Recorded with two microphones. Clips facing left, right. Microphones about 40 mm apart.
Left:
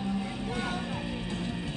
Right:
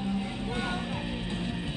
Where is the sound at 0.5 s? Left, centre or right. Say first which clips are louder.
Right 1 dB; right.